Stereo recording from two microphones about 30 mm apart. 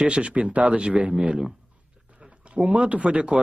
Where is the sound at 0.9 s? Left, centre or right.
Right.